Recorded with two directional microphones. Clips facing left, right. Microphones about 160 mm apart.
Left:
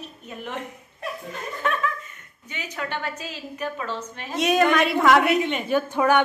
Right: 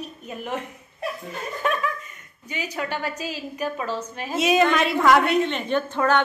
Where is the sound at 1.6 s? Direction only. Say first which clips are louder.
Right 1 dB; 15° right (ahead or behind).